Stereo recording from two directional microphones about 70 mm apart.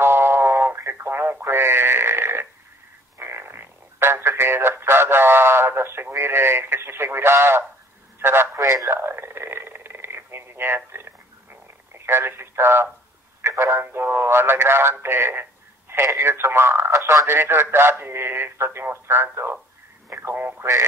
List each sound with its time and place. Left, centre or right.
0.0 s radio: right
3.2 s a man's voice: right
8.5 s speech: right
8.9 s radio: right
13.4 s a sound: right
13.7 s a man's voice: right